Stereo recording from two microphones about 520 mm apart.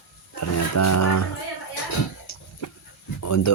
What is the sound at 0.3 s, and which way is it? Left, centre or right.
Speech, left.